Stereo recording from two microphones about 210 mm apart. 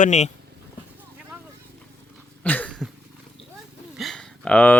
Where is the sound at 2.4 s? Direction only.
5° left (ahead or behind).